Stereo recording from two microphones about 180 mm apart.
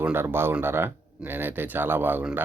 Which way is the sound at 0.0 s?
10° right (ahead or behind).